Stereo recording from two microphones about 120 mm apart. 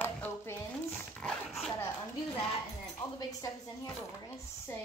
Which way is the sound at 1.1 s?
5° left (ahead or behind).